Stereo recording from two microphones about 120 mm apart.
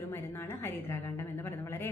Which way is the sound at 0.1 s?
20° left (ahead or behind).